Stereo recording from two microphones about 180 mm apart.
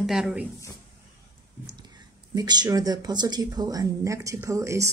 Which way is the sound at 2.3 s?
25° right (ahead or behind).